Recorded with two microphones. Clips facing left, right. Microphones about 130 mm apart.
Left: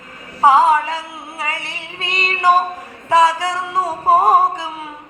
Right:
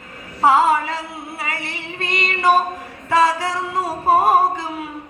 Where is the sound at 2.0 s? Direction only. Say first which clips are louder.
Left 1 dB; 25° left (ahead or behind).